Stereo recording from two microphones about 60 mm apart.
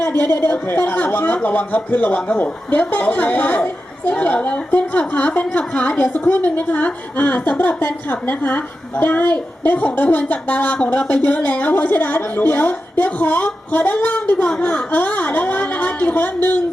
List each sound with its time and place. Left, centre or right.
0.0 s a woman's voice: left